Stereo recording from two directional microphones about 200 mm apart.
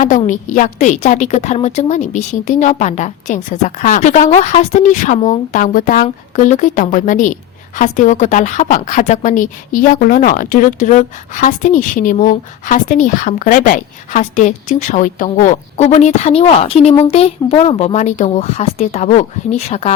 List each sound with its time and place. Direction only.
0.3 s speech: 40° left (ahead or behind)